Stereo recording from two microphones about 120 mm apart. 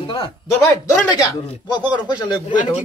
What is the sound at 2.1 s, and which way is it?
Speech, 35° left (ahead or behind).